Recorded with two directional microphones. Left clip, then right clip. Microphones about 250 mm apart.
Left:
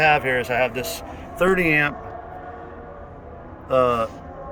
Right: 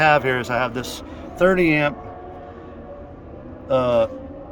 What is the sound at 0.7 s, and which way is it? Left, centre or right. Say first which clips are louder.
Speech: left 1 dB; right.